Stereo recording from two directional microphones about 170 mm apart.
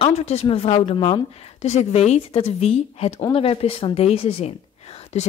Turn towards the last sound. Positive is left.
turn(degrees=40)  # may be behind; listen again after turning